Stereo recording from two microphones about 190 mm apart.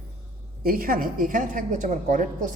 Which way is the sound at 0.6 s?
50° right (ahead or behind).